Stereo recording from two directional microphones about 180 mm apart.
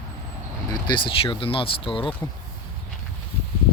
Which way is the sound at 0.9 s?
30° left (ahead or behind).